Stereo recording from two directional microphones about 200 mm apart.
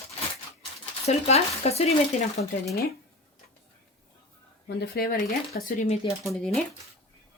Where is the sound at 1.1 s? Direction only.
30° left (ahead or behind).